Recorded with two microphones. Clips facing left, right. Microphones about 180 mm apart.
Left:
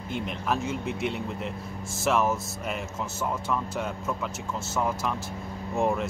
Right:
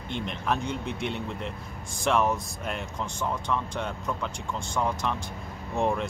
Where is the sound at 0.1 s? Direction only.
5° left (ahead or behind).